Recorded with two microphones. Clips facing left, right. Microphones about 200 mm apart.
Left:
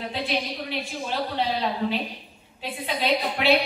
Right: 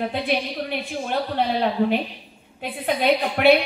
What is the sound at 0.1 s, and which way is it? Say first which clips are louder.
A woman's voice: right 4 dB; 55° right (ahead or behind).